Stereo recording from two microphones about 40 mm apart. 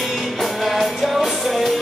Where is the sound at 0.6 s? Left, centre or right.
Centre.